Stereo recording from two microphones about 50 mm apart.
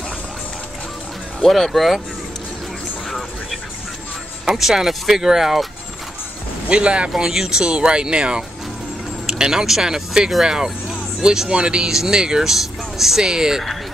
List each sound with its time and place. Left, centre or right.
1.4 s speech: centre
4.5 s speech: centre
6.7 s speech: right
7.1 s speech: centre